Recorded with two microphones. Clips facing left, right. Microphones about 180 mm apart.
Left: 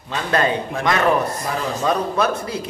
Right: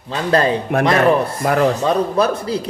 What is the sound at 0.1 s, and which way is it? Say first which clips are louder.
Speech: right 4 dB; 35° right (ahead or behind).